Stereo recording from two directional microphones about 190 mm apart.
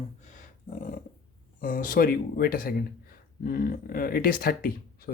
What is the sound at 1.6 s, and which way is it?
Speech, 45° left (ahead or behind).